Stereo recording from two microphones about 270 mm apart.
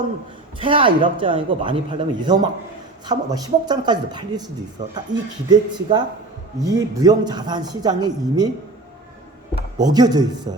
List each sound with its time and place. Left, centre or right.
0.6 s a man's voice: centre
5.1 s speech: right
5.5 s a man's voice: centre
9.7 s a man's voice: centre